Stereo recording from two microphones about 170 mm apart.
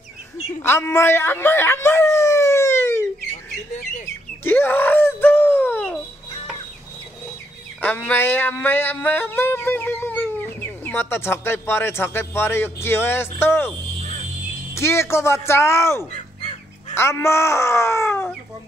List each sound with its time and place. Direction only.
0.6 s speech: 15° left (ahead or behind)
4.5 s wail: 10° left (ahead or behind)
7.8 s yodeling: 10° left (ahead or behind)
14.8 s speech: 15° left (ahead or behind)
16.1 s crow: 35° left (ahead or behind)
16.9 s speech: 15° left (ahead or behind)